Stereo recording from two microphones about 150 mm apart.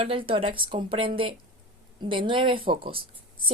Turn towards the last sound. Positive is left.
turn(degrees=-35)  # may be behind; listen again after turning